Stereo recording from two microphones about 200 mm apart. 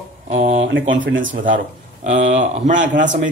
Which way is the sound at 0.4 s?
35° right (ahead or behind).